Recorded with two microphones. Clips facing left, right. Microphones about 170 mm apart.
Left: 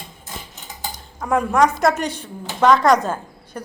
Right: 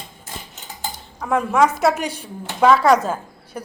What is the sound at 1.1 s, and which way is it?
A woman's voice, centre (ahead or behind).